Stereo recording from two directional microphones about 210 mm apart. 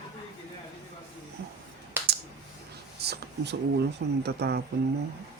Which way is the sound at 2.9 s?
50° right (ahead or behind).